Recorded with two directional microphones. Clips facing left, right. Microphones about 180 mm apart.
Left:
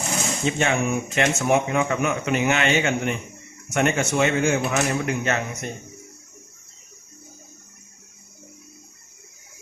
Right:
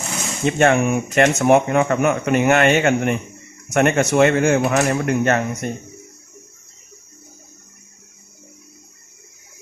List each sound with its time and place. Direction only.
0.4 s speech: 55° right (ahead or behind)